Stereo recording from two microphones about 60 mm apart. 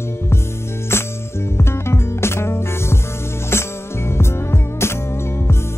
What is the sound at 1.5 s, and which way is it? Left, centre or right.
Music, left.